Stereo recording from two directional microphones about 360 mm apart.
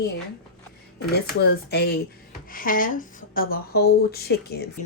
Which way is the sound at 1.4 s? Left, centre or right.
Left.